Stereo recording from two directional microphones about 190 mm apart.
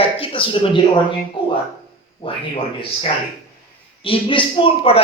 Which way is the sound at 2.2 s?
30° left (ahead or behind).